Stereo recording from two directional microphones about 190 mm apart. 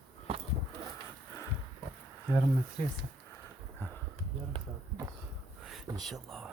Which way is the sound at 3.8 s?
10° left (ahead or behind).